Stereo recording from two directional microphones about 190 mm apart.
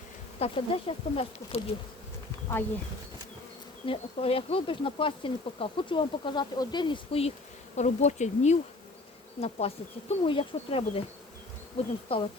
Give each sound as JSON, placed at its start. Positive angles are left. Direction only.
{"t": 0.3, "sound": "speech", "side_deg": 30}
{"t": 3.8, "sound": "speech", "side_deg": 30}
{"t": 12.1, "sound": "speech", "side_deg": 30}